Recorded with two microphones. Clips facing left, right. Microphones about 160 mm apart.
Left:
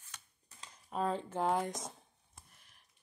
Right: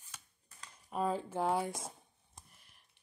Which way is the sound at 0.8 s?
5° right (ahead or behind).